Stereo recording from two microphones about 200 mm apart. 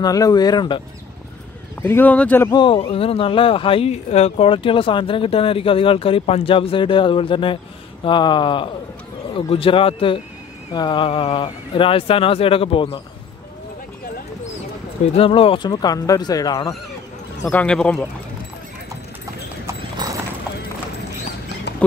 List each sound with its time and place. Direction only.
0.0 s speech: 20° left (ahead or behind)
1.8 s speech: 10° left (ahead or behind)
2.5 s speech: 25° left (ahead or behind)
15.1 s speech: 25° left (ahead or behind)
17.5 s speech: 5° left (ahead or behind)
20.0 s clip-clop: 20° right (ahead or behind)
21.7 s clip-clop: 60° left (ahead or behind)